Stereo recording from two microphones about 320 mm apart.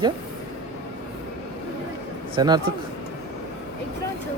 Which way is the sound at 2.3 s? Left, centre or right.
Centre.